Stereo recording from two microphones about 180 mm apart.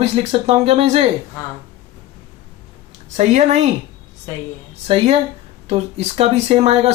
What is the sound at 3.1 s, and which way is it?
Speech, 40° right (ahead or behind).